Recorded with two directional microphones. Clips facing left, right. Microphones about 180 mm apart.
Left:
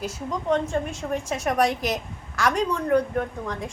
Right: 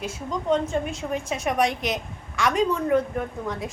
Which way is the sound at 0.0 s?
Centre (ahead or behind).